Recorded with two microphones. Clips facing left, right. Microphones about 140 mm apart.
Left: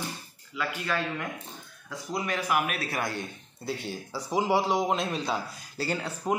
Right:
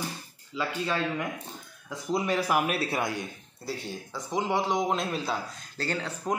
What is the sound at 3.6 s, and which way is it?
A man's voice, centre (ahead or behind).